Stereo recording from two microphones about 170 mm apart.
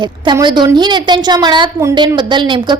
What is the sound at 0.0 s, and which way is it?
A woman's voice, 25° right (ahead or behind).